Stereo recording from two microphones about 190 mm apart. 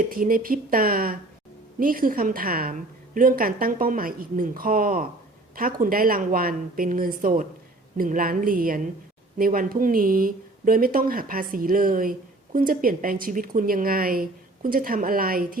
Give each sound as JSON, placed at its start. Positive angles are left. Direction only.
{"t": 0.1, "sound": "speech", "side_deg": -50}